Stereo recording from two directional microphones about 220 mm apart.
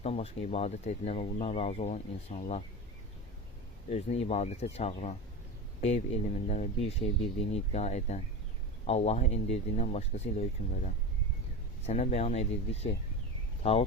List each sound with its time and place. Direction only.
0.0 s speech: 25° left (ahead or behind)
3.8 s speech: 30° left (ahead or behind)